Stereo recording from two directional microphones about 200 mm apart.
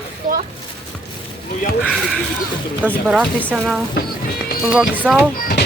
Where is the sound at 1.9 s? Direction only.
Centre (ahead or behind).